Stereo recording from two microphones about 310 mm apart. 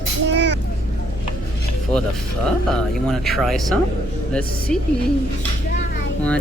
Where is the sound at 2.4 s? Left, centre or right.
Centre.